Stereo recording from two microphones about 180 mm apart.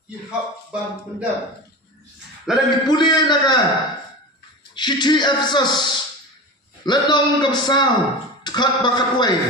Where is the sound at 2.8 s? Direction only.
25° left (ahead or behind).